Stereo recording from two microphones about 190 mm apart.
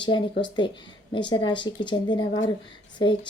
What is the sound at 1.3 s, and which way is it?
Speech, 25° left (ahead or behind).